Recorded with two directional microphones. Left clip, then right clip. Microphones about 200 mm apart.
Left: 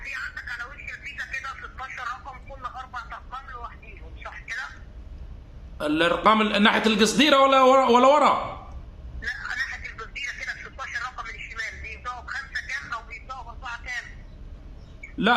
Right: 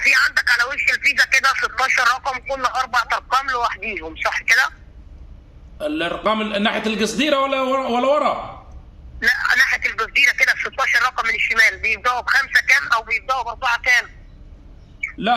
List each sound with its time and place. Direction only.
0.0 s telephone: 45° right (ahead or behind)
5.7 s a man's voice: 10° left (ahead or behind)
9.2 s a sound: 40° right (ahead or behind)